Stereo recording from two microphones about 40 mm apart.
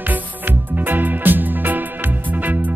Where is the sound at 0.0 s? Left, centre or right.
Right.